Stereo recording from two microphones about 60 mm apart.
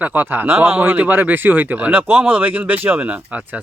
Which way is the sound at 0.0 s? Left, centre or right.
Right.